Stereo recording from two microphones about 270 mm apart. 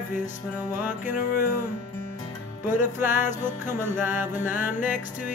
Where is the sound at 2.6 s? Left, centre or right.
Centre.